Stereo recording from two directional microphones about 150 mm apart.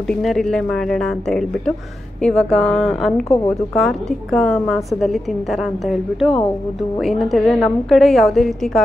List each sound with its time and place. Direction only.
0.1 s a woman's voice: 5° left (ahead or behind)